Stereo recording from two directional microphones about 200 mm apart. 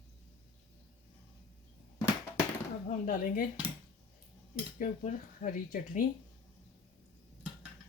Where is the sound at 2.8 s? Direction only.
40° left (ahead or behind).